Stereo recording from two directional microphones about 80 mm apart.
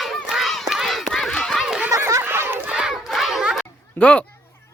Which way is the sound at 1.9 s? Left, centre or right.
Right.